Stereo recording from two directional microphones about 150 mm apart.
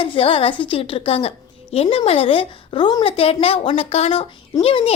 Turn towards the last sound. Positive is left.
turn(degrees=40)  # may be behind; listen again after turning